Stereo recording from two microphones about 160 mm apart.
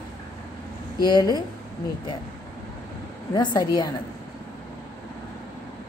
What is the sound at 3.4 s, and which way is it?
Speech, 25° left (ahead or behind).